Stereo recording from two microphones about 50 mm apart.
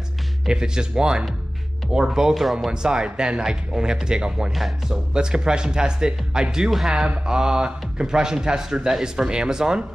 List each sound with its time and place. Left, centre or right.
0.5 s speech: centre
4.6 s speech: centre
5.1 s speech: centre